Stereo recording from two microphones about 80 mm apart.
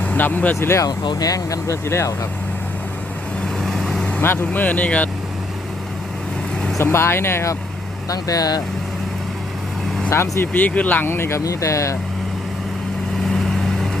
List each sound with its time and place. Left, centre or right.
0.0 s speech: left
0.9 s speech: left
3.6 s vehicle: centre
4.2 s speech: left
6.9 s speech: left
8.1 s speech: left
10.1 s speech: left
13.2 s vehicle: centre